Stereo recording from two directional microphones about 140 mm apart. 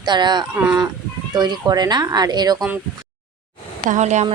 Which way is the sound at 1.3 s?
30° right (ahead or behind).